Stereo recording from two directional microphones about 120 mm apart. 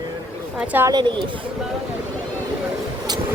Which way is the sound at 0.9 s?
40° right (ahead or behind).